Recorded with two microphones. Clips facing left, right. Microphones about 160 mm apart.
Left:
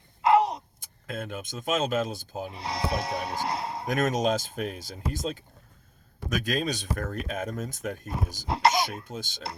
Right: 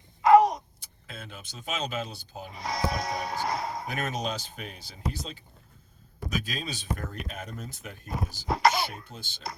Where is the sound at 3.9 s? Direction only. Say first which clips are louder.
Left 10 dB; 45° left (ahead or behind).